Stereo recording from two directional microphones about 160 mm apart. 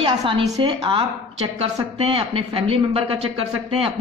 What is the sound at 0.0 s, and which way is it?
A woman's voice, 35° right (ahead or behind).